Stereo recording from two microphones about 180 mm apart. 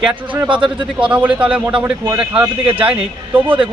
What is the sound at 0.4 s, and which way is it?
Speech, 25° right (ahead or behind).